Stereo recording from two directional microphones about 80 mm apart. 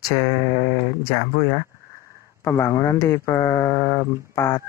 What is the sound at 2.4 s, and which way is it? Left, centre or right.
Mantra, left.